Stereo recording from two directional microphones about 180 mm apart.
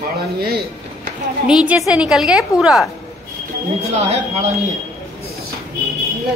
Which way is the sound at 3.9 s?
35° right (ahead or behind).